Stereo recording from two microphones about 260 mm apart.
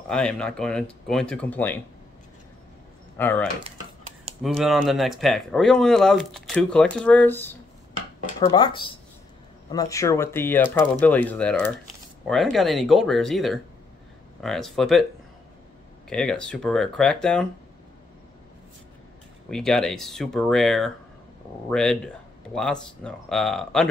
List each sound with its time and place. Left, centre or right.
0.1 s speech: centre
3.2 s speech: centre
3.6 s a sound: right
4.4 s speech: centre
16.1 s speech: centre
19.5 s speech: centre